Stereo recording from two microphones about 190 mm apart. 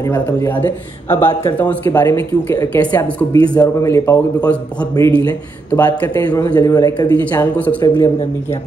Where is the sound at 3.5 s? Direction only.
20° left (ahead or behind).